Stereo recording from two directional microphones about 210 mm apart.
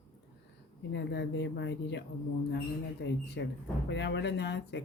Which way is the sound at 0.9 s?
55° left (ahead or behind).